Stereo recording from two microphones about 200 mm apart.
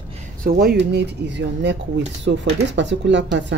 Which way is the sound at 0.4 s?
50° right (ahead or behind).